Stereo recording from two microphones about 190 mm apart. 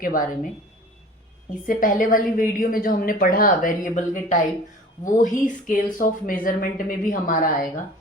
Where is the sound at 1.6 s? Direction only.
45° left (ahead or behind).